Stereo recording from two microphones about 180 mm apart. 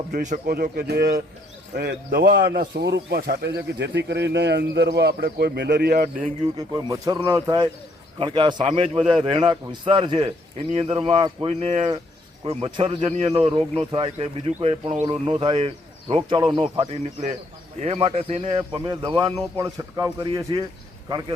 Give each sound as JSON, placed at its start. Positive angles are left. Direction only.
{"t": 0.1, "sound": "speech", "side_deg": -45}
{"t": 6.7, "sound": "speech", "side_deg": -20}
{"t": 18.5, "sound": "speech", "side_deg": -25}